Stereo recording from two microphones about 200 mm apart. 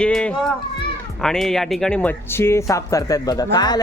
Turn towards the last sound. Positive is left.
turn(degrees=20)  # may be behind; listen again after turning